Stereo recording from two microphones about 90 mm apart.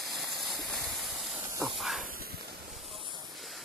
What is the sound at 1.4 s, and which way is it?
Hiss, 30° right (ahead or behind).